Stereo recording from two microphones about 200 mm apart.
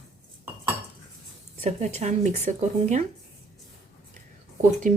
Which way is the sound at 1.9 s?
35° right (ahead or behind).